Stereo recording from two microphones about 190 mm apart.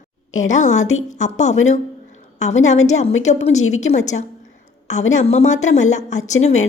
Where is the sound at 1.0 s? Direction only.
40° left (ahead or behind).